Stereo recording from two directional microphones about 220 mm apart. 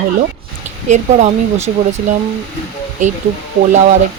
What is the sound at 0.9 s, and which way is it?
Speech, 30° right (ahead or behind).